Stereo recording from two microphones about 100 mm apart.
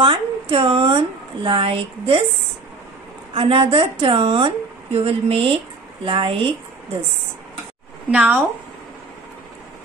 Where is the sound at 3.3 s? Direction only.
70° right (ahead or behind).